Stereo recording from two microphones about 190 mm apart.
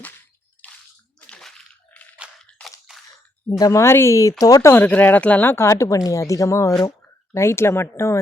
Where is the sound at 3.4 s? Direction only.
20° left (ahead or behind).